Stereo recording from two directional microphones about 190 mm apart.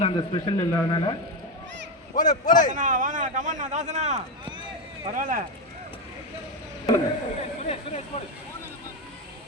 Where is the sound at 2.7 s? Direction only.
45° right (ahead or behind).